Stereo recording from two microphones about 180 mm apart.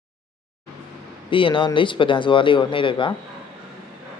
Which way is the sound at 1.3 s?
30° left (ahead or behind).